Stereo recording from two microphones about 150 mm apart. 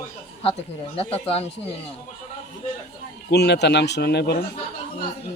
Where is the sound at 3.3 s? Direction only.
90° left.